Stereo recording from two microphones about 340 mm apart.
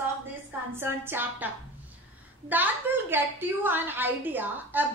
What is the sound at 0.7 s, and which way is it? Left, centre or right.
Speech, centre.